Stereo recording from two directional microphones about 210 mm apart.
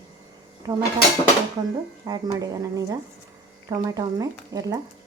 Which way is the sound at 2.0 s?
20° right (ahead or behind).